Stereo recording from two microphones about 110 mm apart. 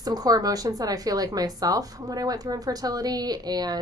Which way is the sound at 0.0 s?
35° right (ahead or behind).